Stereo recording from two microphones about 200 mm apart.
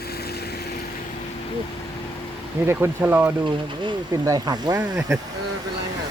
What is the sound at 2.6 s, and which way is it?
Speech, 10° right (ahead or behind).